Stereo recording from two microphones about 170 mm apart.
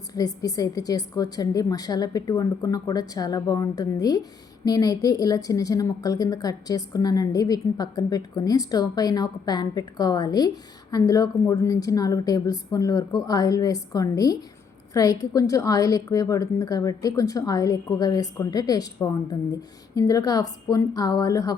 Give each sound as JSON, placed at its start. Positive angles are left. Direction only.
{"t": 0.1, "sound": "a woman's voice", "side_deg": 20}